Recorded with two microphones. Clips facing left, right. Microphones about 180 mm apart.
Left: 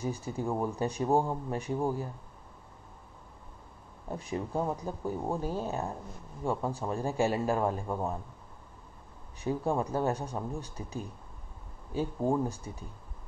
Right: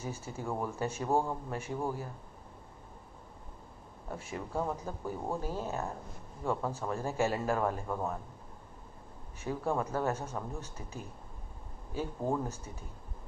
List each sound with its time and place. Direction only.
0.0 s speech: 15° left (ahead or behind)
4.1 s speech: 20° left (ahead or behind)
9.4 s speech: 15° left (ahead or behind)